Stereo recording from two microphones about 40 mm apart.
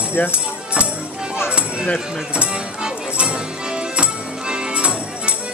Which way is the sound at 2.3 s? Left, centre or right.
Right.